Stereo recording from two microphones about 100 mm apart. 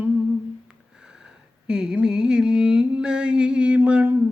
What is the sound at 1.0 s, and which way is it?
Sniff, 10° right (ahead or behind).